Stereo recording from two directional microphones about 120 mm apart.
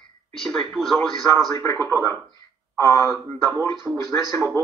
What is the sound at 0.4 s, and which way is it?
Speech, 5° left (ahead or behind).